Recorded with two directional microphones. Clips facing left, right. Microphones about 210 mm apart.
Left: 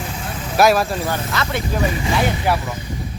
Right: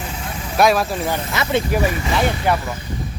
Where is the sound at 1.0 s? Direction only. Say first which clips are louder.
Right 1 dB; 15° right (ahead or behind).